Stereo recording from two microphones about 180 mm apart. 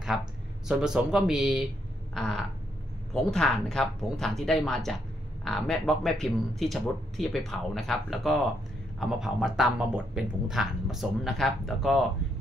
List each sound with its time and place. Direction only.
0.7 s speech: 5° right (ahead or behind)